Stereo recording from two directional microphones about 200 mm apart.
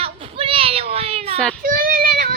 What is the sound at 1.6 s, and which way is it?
Child singing, 45° right (ahead or behind).